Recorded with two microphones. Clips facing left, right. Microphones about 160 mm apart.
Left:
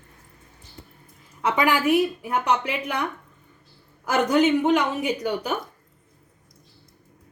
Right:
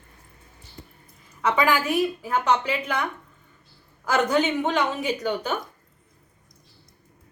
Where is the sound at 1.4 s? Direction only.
20° left (ahead or behind).